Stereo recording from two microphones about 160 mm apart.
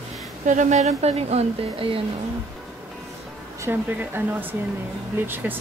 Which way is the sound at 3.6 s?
15° right (ahead or behind).